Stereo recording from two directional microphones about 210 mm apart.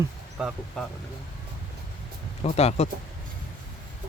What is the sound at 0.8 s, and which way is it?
Speech, 5° left (ahead or behind).